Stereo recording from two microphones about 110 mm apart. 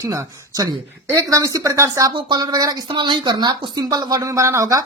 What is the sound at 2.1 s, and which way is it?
Speech, 45° right (ahead or behind).